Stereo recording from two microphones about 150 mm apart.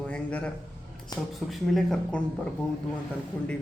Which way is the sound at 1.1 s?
25° left (ahead or behind).